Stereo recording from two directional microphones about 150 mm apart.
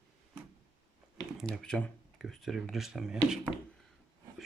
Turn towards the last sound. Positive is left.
turn(degrees=-5)  # may be behind; listen again after turning